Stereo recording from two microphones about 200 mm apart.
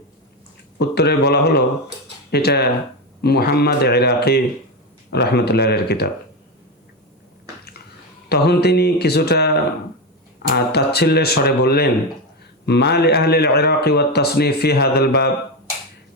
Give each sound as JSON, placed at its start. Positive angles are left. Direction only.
{"t": 0.8, "sound": "a man's voice", "side_deg": 55}
{"t": 8.3, "sound": "a man's voice", "side_deg": 55}